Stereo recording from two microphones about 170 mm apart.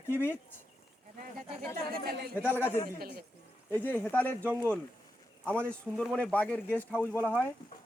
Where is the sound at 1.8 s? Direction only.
70° right (ahead or behind).